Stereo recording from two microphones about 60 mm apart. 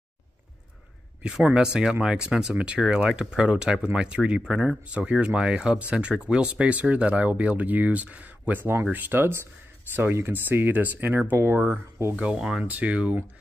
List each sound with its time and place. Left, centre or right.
1.2 s speech: centre; by 11.7 s right
12.4 s speech: centre
12.6 s speech: right